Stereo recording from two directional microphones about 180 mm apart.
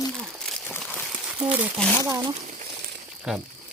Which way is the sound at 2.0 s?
15° right (ahead or behind).